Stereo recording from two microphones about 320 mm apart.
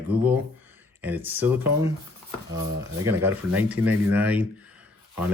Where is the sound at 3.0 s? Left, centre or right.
Centre.